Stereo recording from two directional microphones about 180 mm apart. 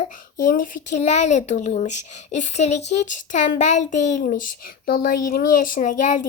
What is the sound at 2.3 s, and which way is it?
Speech, 40° left (ahead or behind).